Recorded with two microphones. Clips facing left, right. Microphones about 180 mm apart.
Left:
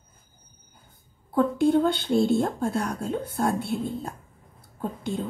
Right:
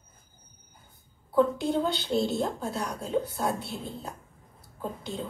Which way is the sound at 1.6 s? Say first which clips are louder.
Left 7 dB; 55° left (ahead or behind).